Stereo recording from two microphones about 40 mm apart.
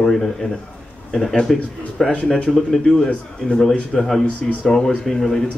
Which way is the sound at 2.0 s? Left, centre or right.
Centre.